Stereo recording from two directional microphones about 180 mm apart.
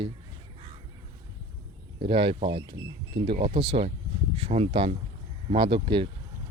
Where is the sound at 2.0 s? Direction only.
30° right (ahead or behind).